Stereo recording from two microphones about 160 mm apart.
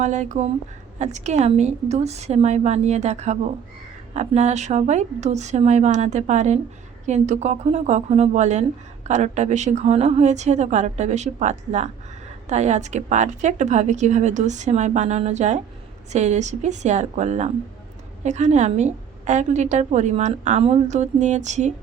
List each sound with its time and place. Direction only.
0.0 s a woman's voice: 50° right (ahead or behind)